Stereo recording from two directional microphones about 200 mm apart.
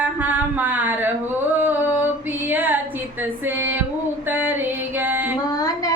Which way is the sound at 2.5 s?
10° right (ahead or behind).